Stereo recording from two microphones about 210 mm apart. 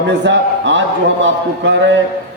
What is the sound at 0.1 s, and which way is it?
A man's voice, 60° right (ahead or behind).